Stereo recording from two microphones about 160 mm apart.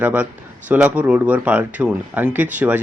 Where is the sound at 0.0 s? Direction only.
10° right (ahead or behind).